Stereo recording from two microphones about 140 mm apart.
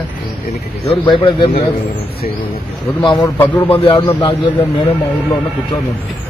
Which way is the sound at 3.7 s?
40° left (ahead or behind).